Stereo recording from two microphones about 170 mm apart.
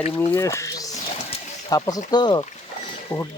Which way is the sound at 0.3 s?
20° left (ahead or behind).